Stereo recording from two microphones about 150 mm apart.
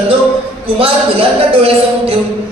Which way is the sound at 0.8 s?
40° right (ahead or behind).